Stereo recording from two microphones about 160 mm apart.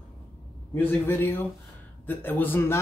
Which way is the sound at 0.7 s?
15° left (ahead or behind).